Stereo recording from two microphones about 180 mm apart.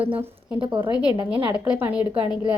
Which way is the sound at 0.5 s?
30° right (ahead or behind).